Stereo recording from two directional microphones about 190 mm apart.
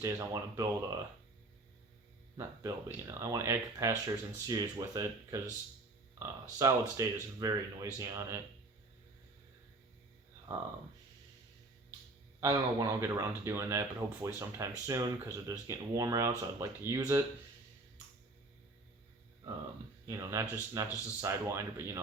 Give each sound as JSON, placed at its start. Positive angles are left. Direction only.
{"t": 0.0, "sound": "speech", "side_deg": -15}
{"t": 2.4, "sound": "speech", "side_deg": -15}
{"t": 12.4, "sound": "speech", "side_deg": -15}
{"t": 20.1, "sound": "speech", "side_deg": -15}